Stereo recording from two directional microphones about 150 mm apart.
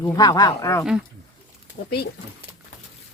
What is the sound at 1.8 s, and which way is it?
Speech, 85° left.